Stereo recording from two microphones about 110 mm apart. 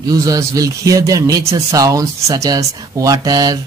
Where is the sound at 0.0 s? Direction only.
35° right (ahead or behind).